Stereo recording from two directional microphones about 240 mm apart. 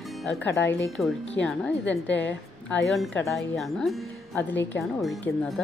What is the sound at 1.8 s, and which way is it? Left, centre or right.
Speech, left.